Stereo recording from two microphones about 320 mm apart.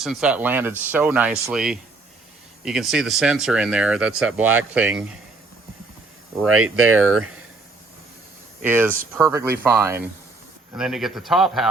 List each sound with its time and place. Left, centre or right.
0.0 s speech: centre
6.4 s speech: centre
6.7 s speech: right
8.6 s speech: centre